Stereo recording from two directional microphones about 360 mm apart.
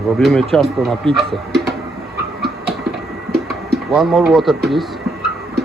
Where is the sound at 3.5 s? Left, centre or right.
Centre.